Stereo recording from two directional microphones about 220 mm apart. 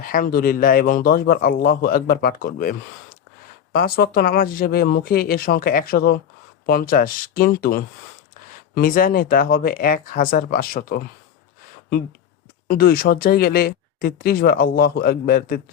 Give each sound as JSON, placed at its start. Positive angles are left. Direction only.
{"t": 0.0, "sound": "speech", "side_deg": 40}
{"t": 12.6, "sound": "speech", "side_deg": 45}